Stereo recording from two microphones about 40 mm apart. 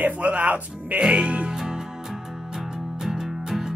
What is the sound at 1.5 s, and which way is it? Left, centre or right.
Music, centre.